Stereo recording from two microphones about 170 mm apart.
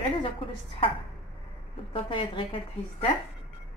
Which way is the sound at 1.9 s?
30° left (ahead or behind).